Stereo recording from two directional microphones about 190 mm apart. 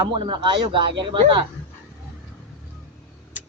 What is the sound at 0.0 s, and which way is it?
A man's voice, 25° right (ahead or behind).